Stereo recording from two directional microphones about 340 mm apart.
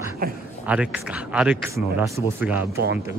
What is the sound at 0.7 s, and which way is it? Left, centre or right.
A man's voice, centre.